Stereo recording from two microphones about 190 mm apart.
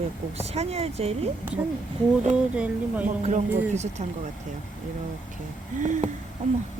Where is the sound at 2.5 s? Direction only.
5° right (ahead or behind).